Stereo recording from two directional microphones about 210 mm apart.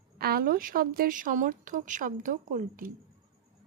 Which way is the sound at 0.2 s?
45° right (ahead or behind).